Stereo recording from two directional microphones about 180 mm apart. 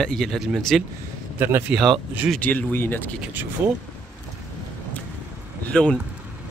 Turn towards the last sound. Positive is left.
turn(degrees=5)  # may be behind; listen again after turning